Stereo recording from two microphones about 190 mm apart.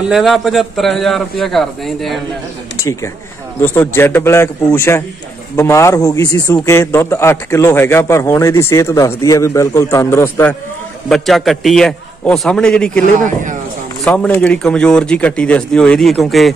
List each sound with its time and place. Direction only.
0.1 s speech: centre (ahead or behind)
2.8 s a man's voice: 15° left (ahead or behind)
13.2 s speech: 40° right (ahead or behind)
14.0 s speech: 10° left (ahead or behind)